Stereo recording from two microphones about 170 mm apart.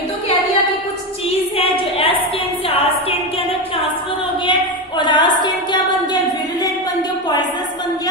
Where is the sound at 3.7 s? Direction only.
30° left (ahead or behind).